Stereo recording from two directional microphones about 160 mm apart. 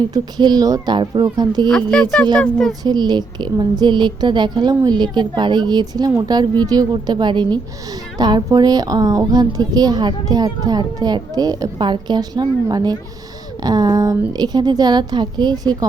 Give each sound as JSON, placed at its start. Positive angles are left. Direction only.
{"t": 0.0, "sound": "a woman's voice", "side_deg": -25}
{"t": 1.7, "sound": "speech", "side_deg": 5}
{"t": 2.8, "sound": "a woman's voice", "side_deg": -25}